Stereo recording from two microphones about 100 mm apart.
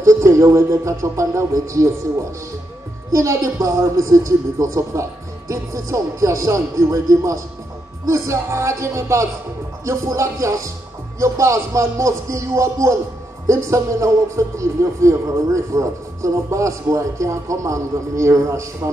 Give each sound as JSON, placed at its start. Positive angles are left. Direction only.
{"t": 0.0, "sound": "speech", "side_deg": -30}
{"t": 3.1, "sound": "a man's voice", "side_deg": -30}